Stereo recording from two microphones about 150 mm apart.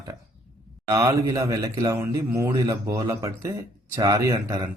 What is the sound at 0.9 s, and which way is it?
A man's voice, 20° right (ahead or behind).